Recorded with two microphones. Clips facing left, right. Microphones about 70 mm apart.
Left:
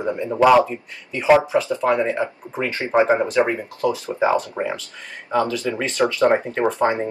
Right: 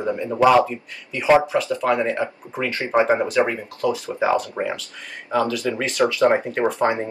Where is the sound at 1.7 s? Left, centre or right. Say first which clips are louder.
Even; left.